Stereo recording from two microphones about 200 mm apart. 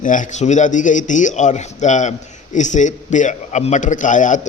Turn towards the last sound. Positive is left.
turn(degrees=40)  # may be behind; listen again after turning